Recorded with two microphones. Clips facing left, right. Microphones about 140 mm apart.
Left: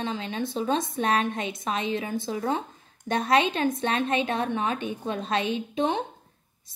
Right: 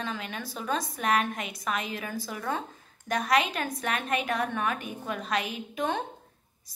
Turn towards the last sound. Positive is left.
turn(degrees=20)  # may be behind; listen again after turning